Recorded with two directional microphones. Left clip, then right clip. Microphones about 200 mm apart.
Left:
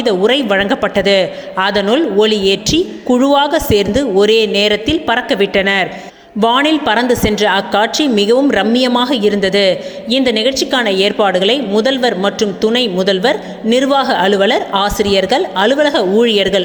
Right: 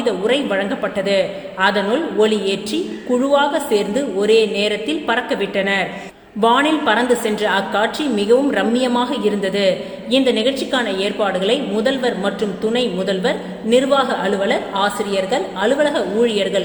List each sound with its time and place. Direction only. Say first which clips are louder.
0.0 s a man's voice: left 5 dB; 30° left (ahead or behind)